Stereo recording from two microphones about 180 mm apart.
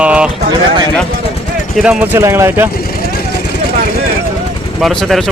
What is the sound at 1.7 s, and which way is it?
Speech, 5° right (ahead or behind).